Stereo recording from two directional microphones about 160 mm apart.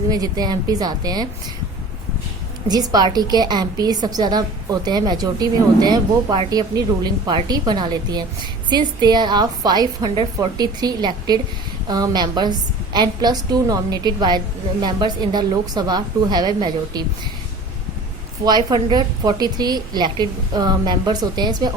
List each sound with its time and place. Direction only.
0.1 s a woman's voice: 25° right (ahead or behind)
2.6 s a woman's voice: 25° right (ahead or behind)
18.4 s a woman's voice: 25° right (ahead or behind)